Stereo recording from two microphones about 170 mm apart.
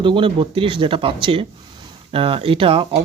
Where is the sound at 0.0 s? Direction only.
30° right (ahead or behind).